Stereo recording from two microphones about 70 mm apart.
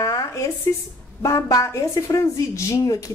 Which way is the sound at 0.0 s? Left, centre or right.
Left.